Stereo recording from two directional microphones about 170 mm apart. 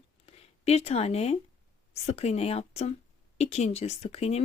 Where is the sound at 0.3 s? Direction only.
40° left (ahead or behind).